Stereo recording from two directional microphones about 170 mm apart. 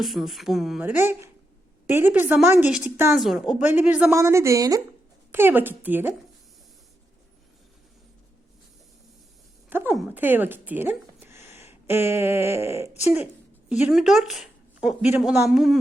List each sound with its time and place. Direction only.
0.0 s speech: centre (ahead or behind)
9.6 s a sound: 10° right (ahead or behind)
10.0 s speech: 10° right (ahead or behind)
12.9 s speech: 40° left (ahead or behind)
13.8 s speech: centre (ahead or behind)